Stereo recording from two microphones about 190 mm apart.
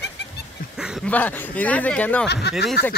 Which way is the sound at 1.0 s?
10° left (ahead or behind).